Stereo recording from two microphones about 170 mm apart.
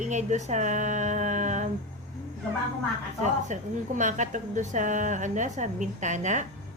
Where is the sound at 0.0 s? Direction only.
45° right (ahead or behind).